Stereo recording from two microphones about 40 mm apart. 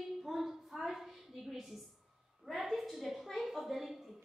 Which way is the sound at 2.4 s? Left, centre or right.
Centre.